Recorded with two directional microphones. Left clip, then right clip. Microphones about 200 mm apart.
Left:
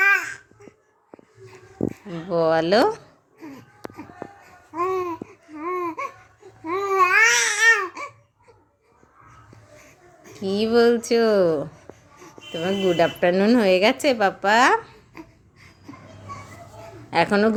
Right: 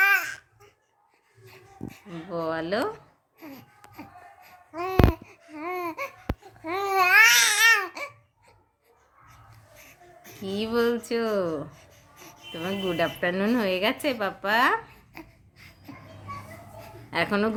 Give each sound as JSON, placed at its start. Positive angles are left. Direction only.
{"t": 0.0, "sound": "babbling", "side_deg": -15}
{"t": 2.3, "sound": "a woman's voice", "side_deg": 25}
{"t": 3.3, "sound": "a sound", "side_deg": -15}
{"t": 4.7, "sound": "babbling", "side_deg": -20}
{"t": 9.7, "sound": "wheeze", "side_deg": -20}
{"t": 10.4, "sound": "a woman's voice", "side_deg": 20}
{"t": 11.8, "sound": "a sound", "side_deg": -20}
{"t": 12.5, "sound": "a woman's voice", "side_deg": 20}
{"t": 17.1, "sound": "a woman's voice", "side_deg": 20}